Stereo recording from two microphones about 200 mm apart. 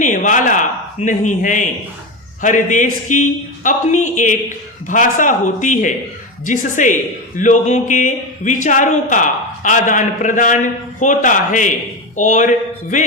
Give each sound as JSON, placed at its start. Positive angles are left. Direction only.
{"t": 0.0, "sound": "a man's voice", "side_deg": 40}